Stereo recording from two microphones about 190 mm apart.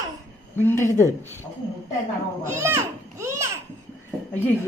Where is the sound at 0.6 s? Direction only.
10° left (ahead or behind).